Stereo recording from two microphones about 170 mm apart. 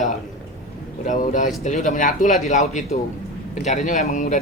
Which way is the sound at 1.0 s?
50° left (ahead or behind).